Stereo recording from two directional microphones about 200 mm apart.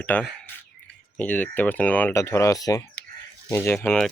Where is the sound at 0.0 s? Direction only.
10° left (ahead or behind).